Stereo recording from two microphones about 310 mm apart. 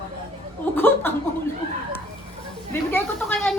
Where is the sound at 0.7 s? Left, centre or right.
Centre.